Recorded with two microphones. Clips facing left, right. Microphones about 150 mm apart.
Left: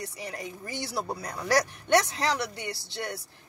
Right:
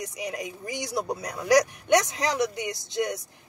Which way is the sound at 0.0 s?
15° right (ahead or behind).